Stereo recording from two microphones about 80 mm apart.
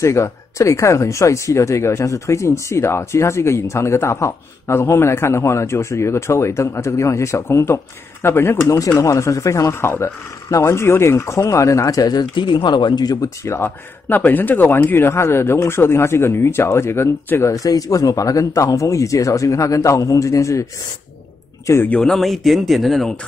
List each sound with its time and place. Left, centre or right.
0.0 s speech: left
21.7 s speech: left
22.0 s speech: centre